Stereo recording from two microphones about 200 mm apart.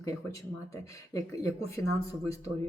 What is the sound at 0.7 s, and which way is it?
Speech, 15° left (ahead or behind).